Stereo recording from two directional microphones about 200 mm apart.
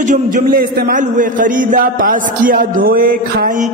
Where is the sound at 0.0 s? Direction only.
40° right (ahead or behind).